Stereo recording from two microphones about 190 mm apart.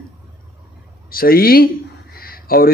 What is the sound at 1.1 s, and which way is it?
Speech, 50° left (ahead or behind).